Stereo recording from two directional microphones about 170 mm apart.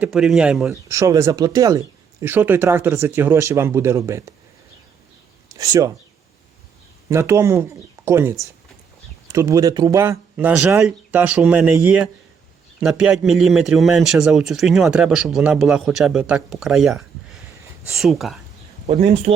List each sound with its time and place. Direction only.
0.0 s a man's voice: 5° right (ahead or behind)
0.7 s speech: 15° right (ahead or behind)
5.5 s speech: 20° right (ahead or behind)
7.1 s a man's voice: 15° right (ahead or behind); by 18.3 s centre (ahead or behind)
18.9 s speech: 40° right (ahead or behind)